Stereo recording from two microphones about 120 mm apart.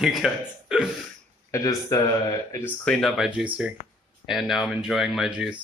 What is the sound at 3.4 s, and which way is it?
Speech, 5° right (ahead or behind).